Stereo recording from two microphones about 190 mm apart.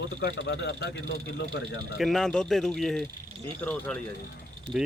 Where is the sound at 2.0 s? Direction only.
Centre (ahead or behind).